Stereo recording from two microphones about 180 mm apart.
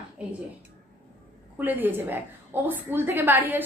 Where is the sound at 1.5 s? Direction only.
10° right (ahead or behind).